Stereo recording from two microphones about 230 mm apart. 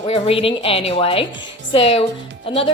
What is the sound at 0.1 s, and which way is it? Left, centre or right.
Speech, left.